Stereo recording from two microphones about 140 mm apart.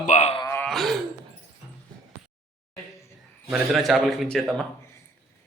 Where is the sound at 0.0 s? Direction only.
55° left (ahead or behind).